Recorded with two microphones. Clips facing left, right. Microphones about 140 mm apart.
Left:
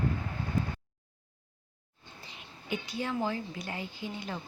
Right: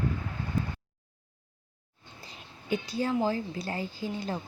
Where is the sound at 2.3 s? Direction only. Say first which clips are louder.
Right 5 dB; 40° right (ahead or behind).